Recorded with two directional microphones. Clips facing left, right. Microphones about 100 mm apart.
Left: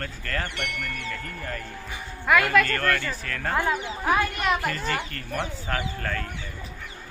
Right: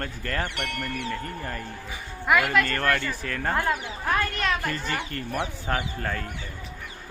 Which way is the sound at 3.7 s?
10° left (ahead or behind).